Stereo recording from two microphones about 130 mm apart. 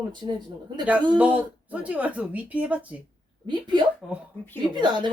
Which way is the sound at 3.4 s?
35° right (ahead or behind).